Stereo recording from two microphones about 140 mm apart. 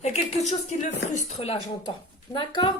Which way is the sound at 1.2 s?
50° left (ahead or behind).